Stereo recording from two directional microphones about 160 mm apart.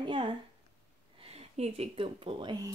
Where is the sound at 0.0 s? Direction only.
30° right (ahead or behind).